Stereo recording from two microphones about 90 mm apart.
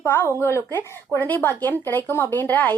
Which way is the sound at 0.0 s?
25° left (ahead or behind).